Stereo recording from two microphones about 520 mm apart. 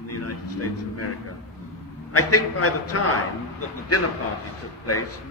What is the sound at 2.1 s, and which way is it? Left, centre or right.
Speech, left.